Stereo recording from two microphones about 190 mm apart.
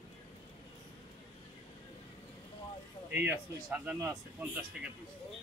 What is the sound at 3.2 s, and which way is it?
Speech, 10° right (ahead or behind).